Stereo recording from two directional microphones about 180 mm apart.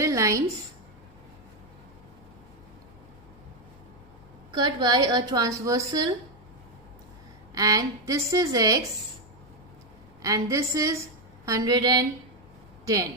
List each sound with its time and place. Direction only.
0.0 s a sound: 15° right (ahead or behind)
4.5 s a woman's voice: 25° right (ahead or behind)
7.5 s a woman's voice: 20° right (ahead or behind)
10.2 s a woman's voice: 15° right (ahead or behind)